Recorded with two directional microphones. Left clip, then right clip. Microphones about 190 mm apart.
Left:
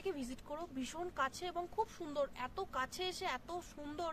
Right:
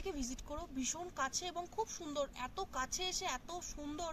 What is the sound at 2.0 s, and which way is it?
Speech, 15° left (ahead or behind).